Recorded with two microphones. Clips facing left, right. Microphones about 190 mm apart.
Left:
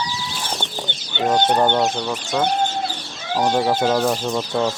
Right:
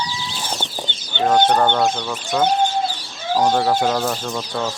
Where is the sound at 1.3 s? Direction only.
20° left (ahead or behind).